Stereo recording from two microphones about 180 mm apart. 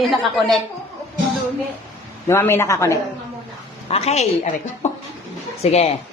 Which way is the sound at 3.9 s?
35° left (ahead or behind).